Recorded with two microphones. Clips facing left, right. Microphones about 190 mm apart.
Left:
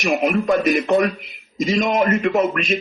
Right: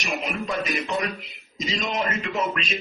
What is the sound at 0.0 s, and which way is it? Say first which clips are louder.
A man's voice: left 10 dB; 55° left (ahead or behind).